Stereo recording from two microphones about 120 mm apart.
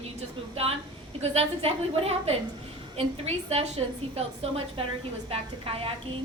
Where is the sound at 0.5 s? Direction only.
55° right (ahead or behind).